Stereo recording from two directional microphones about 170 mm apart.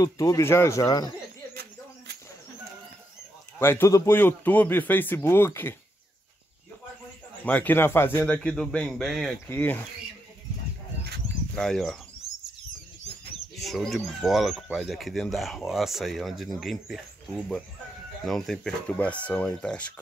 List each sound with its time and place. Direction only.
0.0 s speech: 20° left (ahead or behind)
3.5 s speech: 15° left (ahead or behind)
7.4 s speech: 10° left (ahead or behind)
9.5 s speech: 10° left (ahead or behind)
11.5 s speech: centre (ahead or behind)
13.6 s speech: centre (ahead or behind)
18.2 s speech: centre (ahead or behind)